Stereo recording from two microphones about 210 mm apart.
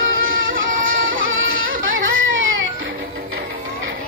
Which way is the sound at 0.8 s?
70° right (ahead or behind).